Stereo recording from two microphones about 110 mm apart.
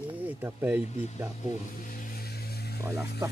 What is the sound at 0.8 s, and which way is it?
Speech, 80° left.